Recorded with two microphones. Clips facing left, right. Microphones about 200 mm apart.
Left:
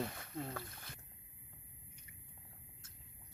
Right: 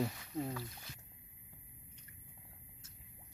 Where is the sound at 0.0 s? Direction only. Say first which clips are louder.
Right 4 dB; 55° left (ahead or behind).